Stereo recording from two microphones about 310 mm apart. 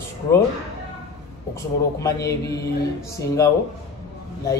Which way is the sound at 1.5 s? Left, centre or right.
Centre.